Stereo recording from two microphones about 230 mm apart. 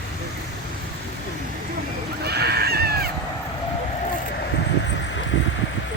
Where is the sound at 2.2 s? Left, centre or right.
Right.